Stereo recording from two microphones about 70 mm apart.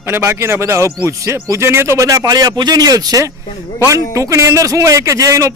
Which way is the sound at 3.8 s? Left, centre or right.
Right.